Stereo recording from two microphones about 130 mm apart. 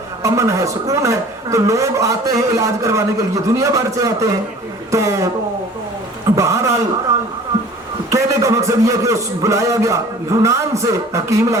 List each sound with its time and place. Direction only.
0.2 s a man's voice: 25° right (ahead or behind)
6.3 s a man's voice: 25° right (ahead or behind)
7.1 s a sound: 20° right (ahead or behind)
8.1 s a man's voice: 25° right (ahead or behind)